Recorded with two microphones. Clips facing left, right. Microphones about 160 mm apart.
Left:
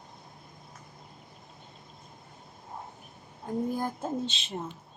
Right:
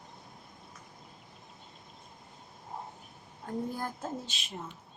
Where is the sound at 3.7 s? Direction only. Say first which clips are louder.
Left 5 dB; 15° left (ahead or behind).